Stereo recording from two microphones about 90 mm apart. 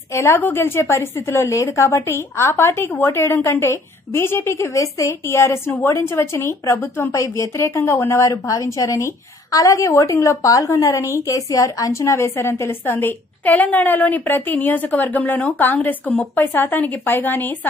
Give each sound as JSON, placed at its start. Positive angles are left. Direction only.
{"t": 0.1, "sound": "a woman's voice", "side_deg": 30}